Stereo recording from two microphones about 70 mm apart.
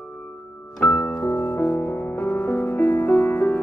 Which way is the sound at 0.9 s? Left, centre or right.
Left.